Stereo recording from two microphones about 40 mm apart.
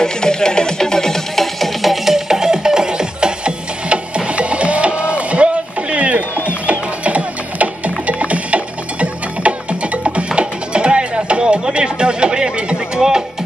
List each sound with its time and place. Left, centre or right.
0.0 s music: centre